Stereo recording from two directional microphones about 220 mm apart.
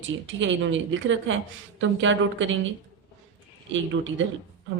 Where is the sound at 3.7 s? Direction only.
60° right (ahead or behind).